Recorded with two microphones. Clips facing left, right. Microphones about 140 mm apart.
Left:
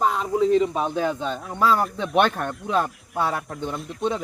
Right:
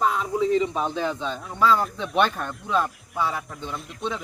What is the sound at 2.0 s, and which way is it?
A man's voice, 55° left (ahead or behind).